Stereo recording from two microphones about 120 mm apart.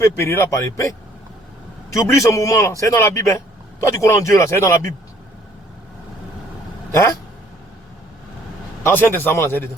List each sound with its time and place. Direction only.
0.0 s a man's voice: 20° left (ahead or behind)
2.0 s a man's voice: 25° left (ahead or behind)
6.9 s a man's voice: 25° left (ahead or behind)
8.8 s a man's voice: 15° left (ahead or behind)